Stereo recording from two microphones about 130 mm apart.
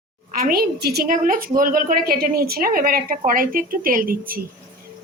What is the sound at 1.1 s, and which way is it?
Speech, 90° right.